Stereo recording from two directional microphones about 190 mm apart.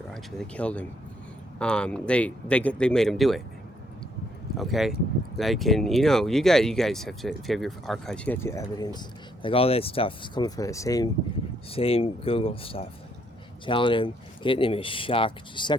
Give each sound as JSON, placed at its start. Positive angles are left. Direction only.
{"t": 0.1, "sound": "speech", "side_deg": 5}
{"t": 4.5, "sound": "speech", "side_deg": 0}
{"t": 11.7, "sound": "speech", "side_deg": 30}